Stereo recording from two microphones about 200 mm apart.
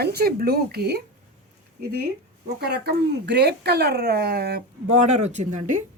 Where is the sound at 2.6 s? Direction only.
55° right (ahead or behind).